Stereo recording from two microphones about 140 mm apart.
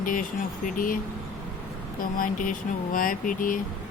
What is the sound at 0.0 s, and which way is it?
Speech, 75° left (ahead or behind).